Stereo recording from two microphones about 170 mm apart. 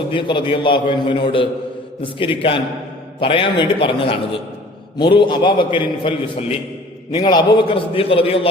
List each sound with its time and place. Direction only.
0.1 s a man's voice: 30° left (ahead or behind)
3.2 s a man's voice: 30° left (ahead or behind)